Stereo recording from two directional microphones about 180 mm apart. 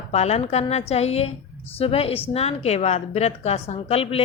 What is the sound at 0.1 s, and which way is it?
A woman's voice, 35° left (ahead or behind).